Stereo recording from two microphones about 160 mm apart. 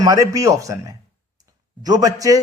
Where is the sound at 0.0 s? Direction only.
20° right (ahead or behind).